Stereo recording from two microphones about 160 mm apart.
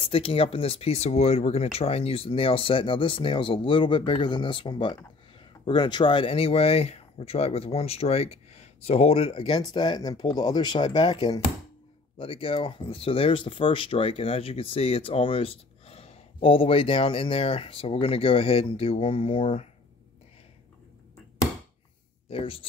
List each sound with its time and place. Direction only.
0.0 s speech: 35° left (ahead or behind)
22.3 s speech: 35° left (ahead or behind)